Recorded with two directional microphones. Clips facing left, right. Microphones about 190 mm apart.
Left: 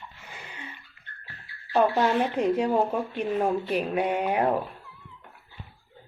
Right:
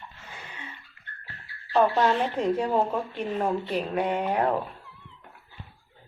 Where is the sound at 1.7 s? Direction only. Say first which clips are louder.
Even; 10° left (ahead or behind).